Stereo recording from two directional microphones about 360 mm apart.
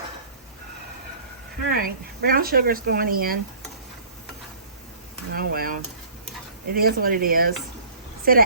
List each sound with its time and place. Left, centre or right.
1.6 s speech: right
5.3 s a woman's voice: right